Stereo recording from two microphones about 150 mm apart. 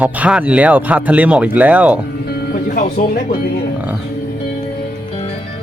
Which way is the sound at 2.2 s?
90° left.